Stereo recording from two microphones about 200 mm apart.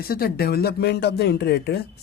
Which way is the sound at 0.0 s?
50° left (ahead or behind).